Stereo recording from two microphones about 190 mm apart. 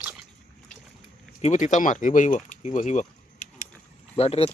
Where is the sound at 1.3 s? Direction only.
40° left (ahead or behind).